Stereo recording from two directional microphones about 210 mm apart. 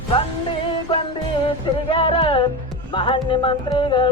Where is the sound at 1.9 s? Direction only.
25° left (ahead or behind).